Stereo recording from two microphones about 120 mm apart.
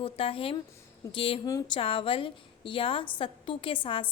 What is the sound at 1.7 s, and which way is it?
A woman's voice, 50° left (ahead or behind).